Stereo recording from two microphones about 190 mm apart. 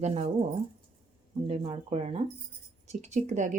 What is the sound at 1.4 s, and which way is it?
Speech, 30° right (ahead or behind).